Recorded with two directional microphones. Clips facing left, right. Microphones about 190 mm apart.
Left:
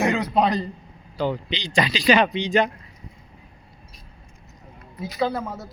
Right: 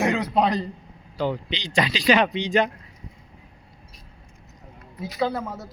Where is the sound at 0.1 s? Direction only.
Centre (ahead or behind).